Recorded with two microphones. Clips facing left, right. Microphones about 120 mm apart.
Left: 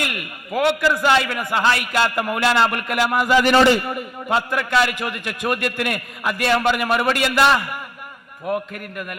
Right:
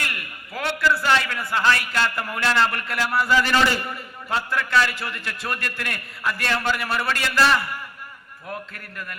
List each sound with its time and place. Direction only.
0.0 s a man's voice: 15° left (ahead or behind)
8.7 s a man's voice: 15° left (ahead or behind)